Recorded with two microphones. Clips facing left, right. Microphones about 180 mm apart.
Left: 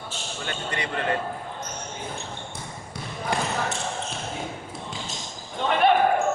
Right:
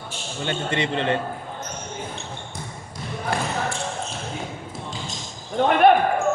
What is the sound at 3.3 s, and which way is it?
Speech, 15° left (ahead or behind).